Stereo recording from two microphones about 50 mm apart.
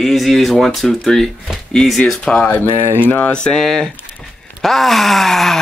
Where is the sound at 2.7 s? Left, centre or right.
Right.